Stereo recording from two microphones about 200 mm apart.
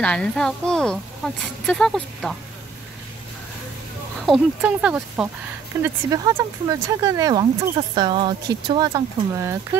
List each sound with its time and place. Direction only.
0.0 s a woman's voice: 5° left (ahead or behind)
4.3 s a woman's voice: 5° right (ahead or behind)